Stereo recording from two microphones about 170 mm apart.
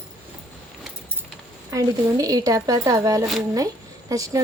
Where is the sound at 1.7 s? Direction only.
20° right (ahead or behind).